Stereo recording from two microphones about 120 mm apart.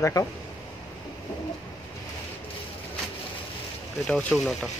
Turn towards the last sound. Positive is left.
turn(degrees=10)  # may be behind; listen again after turning